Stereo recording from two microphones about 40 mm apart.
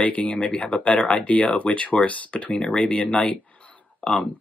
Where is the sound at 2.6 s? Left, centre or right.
Left.